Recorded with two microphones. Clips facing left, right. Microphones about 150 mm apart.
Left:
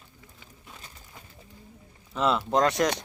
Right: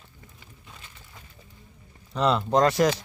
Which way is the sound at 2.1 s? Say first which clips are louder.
Right 2 dB; centre (ahead or behind).